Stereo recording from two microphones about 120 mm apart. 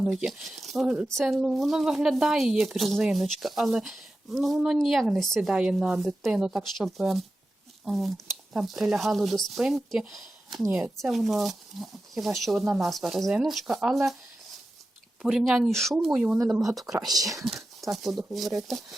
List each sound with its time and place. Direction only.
0.0 s speech: 5° right (ahead or behind)
15.2 s speech: 5° right (ahead or behind)
17.1 s speech: 30° right (ahead or behind)
17.3 s whispering: centre (ahead or behind)
17.9 s speech: centre (ahead or behind)